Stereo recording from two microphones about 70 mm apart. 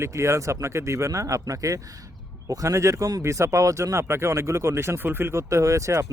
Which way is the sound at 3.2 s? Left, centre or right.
Right.